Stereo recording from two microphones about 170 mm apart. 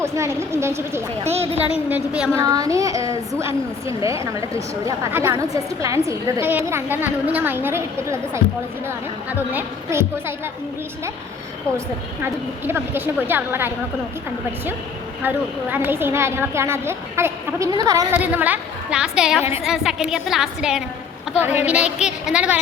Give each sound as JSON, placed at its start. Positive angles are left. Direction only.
{"t": 0.0, "sound": "a woman's voice", "side_deg": -15}
{"t": 1.2, "sound": "speech", "side_deg": -40}
{"t": 1.9, "sound": "a woman's voice", "side_deg": -5}
{"t": 2.4, "sound": "a woman's voice", "side_deg": -20}
{"t": 9.5, "sound": "a woman's voice", "side_deg": -15}
{"t": 12.2, "sound": "a woman's voice", "side_deg": -15}
{"t": 15.7, "sound": "a woman's voice", "side_deg": -10}